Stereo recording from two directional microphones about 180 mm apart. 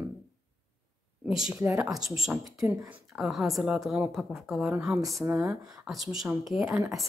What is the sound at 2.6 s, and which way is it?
Speech, 15° right (ahead or behind).